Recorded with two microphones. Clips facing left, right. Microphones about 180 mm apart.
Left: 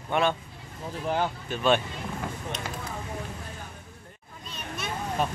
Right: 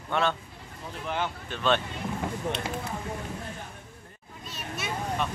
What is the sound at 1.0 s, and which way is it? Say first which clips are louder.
Speech: left 4 dB; 40° left (ahead or behind).